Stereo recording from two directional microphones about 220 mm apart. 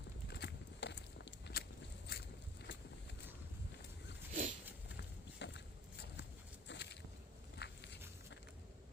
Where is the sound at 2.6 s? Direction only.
50° left (ahead or behind).